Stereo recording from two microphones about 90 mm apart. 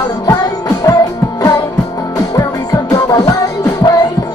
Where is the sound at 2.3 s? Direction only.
45° left (ahead or behind).